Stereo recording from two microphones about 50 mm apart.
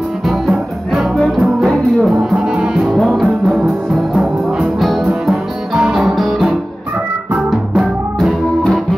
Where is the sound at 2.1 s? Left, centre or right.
Centre.